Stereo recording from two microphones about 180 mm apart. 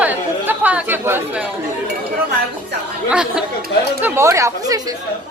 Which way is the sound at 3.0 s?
5° right (ahead or behind).